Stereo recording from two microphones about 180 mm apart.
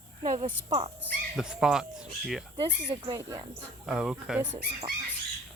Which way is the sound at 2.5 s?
30° right (ahead or behind).